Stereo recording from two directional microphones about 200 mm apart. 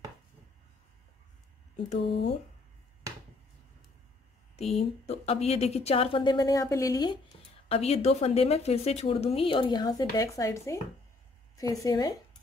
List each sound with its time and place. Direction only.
4.6 s speech: 30° left (ahead or behind)
7.6 s a woman's voice: 30° left (ahead or behind)